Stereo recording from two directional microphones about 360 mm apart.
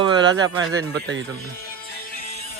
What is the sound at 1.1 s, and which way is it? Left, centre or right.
Speech, right.